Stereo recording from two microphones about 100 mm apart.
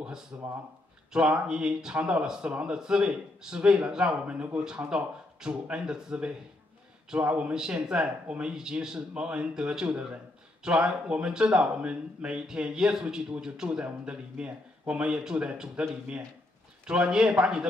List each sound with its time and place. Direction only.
0.3 s speech: 20° right (ahead or behind)
1.1 s a man's voice: 10° right (ahead or behind)